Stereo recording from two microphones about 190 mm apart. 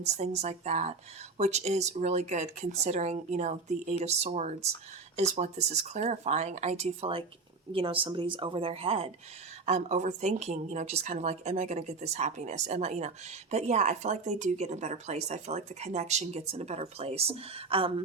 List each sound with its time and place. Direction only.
0.0 s a woman's voice: 35° right (ahead or behind)